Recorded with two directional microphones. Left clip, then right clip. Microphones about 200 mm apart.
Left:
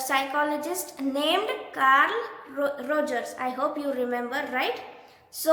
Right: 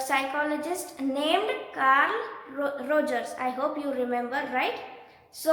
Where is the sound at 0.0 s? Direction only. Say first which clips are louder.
Left 2 dB; 15° left (ahead or behind).